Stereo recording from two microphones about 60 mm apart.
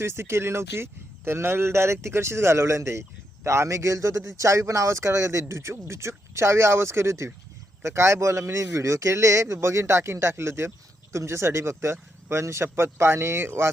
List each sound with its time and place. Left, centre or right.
0.0 s a man's voice: right
8.4 s a man's voice: right